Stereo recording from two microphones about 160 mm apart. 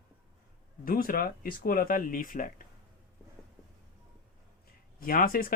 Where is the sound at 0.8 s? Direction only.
65° left (ahead or behind).